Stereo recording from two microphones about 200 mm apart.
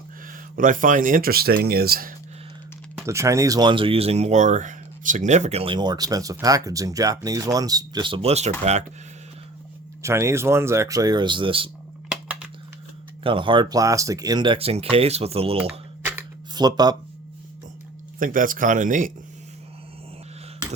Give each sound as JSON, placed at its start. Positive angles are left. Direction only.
{"t": 0.3, "sound": "speech", "side_deg": -40}
{"t": 3.1, "sound": "speech", "side_deg": -15}
{"t": 10.0, "sound": "speech", "side_deg": -15}
{"t": 12.1, "sound": "a sound", "side_deg": -5}
{"t": 13.2, "sound": "speech", "side_deg": -25}
{"t": 16.6, "sound": "speech", "side_deg": -20}
{"t": 18.2, "sound": "speech", "side_deg": -45}